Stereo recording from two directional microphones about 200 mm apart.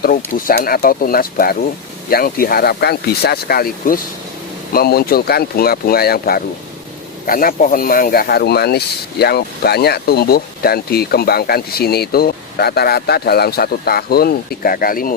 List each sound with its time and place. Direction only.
0.4 s speech: 45° left (ahead or behind)